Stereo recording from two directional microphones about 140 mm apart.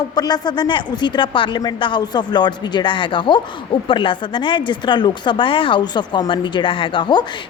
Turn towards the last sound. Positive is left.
turn(degrees=30)  # may be behind; listen again after turning